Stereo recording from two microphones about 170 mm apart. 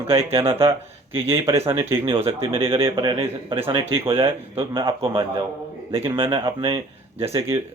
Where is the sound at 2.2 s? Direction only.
35° right (ahead or behind).